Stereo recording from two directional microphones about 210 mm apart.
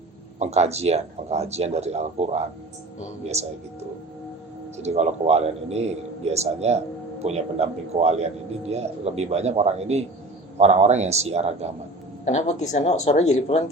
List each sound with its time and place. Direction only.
0.3 s a man's voice: 30° right (ahead or behind)
4.8 s a man's voice: 30° right (ahead or behind)
12.2 s speech: 35° left (ahead or behind)